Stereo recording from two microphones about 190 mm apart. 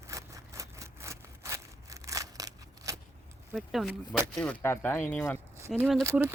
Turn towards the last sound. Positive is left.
turn(degrees=-15)  # may be behind; listen again after turning